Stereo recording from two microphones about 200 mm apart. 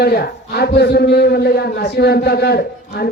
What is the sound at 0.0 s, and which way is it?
A man's voice, 50° left (ahead or behind).